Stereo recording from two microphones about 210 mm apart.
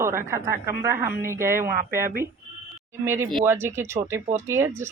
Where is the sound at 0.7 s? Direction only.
45° right (ahead or behind).